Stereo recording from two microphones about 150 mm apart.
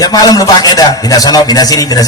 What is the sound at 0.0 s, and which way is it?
A man's voice, 25° left (ahead or behind).